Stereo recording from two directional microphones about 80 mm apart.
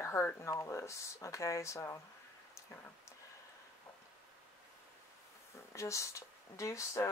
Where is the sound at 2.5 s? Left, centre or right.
Left.